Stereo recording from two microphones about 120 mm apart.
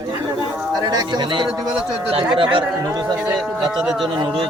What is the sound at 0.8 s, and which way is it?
Speech, 30° right (ahead or behind).